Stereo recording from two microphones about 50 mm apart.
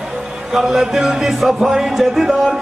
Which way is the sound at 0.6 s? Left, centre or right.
Centre.